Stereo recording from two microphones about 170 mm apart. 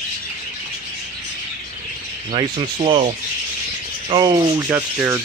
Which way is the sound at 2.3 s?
30° right (ahead or behind).